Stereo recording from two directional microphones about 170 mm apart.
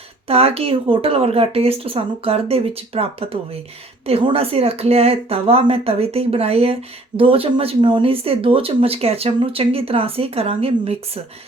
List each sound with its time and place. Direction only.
0.3 s speech: 35° right (ahead or behind)